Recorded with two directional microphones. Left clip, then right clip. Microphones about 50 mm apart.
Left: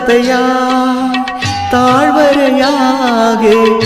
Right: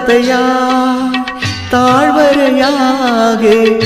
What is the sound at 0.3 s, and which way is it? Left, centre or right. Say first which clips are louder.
Music: even; centre.